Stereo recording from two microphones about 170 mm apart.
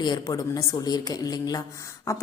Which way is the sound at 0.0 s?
20° left (ahead or behind).